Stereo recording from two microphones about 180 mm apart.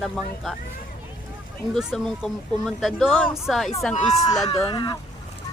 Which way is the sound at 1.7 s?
Centre (ahead or behind).